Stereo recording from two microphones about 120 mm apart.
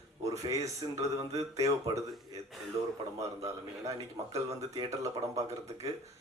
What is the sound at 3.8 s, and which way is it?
A man's voice, 30° right (ahead or behind).